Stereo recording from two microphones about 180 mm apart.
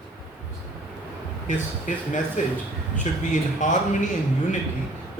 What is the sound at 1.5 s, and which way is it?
Speech, 45° left (ahead or behind).